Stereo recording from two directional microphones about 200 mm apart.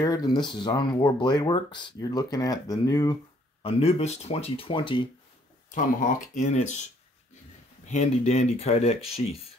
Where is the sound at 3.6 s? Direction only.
30° left (ahead or behind).